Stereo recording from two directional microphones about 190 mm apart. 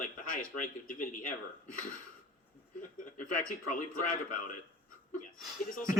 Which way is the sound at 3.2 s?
45° left (ahead or behind).